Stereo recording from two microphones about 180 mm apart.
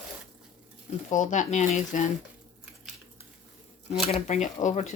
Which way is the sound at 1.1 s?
45° left (ahead or behind).